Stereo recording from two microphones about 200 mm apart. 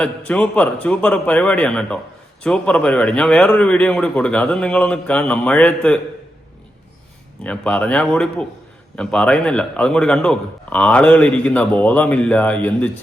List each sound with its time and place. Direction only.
0.0 s a man's voice: 5° left (ahead or behind)
7.4 s a man's voice: 5° left (ahead or behind)